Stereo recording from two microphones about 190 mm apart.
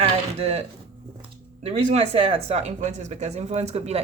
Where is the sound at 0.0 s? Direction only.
35° right (ahead or behind).